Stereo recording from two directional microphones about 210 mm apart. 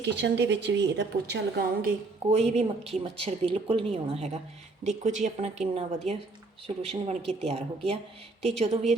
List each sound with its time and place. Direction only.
0.0 s a woman's voice: 55° right (ahead or behind)
2.5 s a woman's voice: 30° right (ahead or behind)